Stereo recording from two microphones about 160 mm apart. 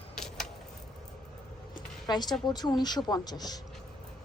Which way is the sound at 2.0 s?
25° left (ahead or behind).